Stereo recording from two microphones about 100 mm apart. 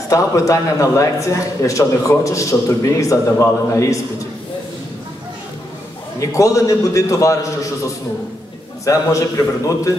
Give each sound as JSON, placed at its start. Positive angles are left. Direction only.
{"t": 0.1, "sound": "a man's voice", "side_deg": 30}
{"t": 6.1, "sound": "a man's voice", "side_deg": 35}